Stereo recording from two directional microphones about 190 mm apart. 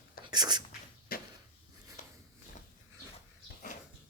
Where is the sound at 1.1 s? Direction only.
50° left (ahead or behind).